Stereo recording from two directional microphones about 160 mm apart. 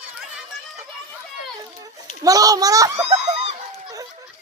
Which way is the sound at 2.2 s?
20° right (ahead or behind).